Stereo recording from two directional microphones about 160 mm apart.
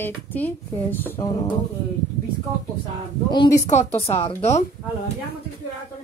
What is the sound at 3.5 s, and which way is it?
Speech, 45° left (ahead or behind).